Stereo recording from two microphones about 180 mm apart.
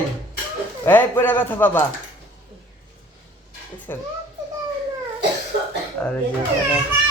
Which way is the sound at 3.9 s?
15° left (ahead or behind).